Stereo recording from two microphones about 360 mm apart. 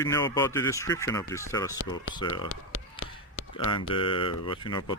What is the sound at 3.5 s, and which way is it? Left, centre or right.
Speech, centre.